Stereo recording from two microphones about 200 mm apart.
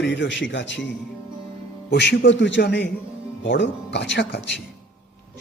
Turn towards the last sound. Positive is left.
turn(degrees=60)  # may be behind; listen again after turning